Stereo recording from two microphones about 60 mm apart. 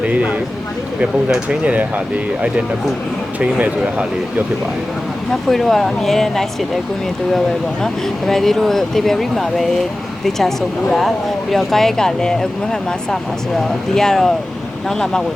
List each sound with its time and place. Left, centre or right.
0.0 s speech: right
1.5 s speech: right
5.5 s speech: centre
8.3 s speech: centre
13.9 s speech: centre